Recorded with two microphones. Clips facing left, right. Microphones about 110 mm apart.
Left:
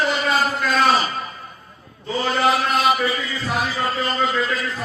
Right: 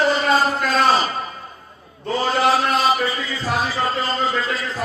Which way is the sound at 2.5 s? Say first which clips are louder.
Even; 30° right (ahead or behind).